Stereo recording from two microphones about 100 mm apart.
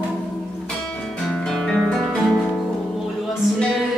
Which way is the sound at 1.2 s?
5° left (ahead or behind).